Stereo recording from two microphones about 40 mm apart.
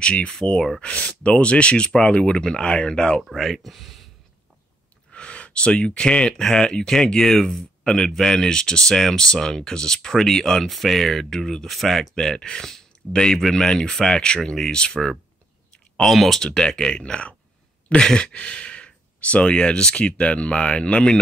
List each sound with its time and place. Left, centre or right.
0.0 s speech: left
3.2 s speech: centre
5.1 s speech: left; by 7.6 s centre
7.8 s speech: centre
16.1 s speech: centre
16.3 s speech: centre